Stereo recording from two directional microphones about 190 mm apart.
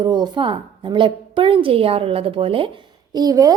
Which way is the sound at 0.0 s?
20° right (ahead or behind).